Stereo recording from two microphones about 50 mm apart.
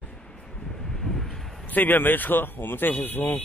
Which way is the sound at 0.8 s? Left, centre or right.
Centre.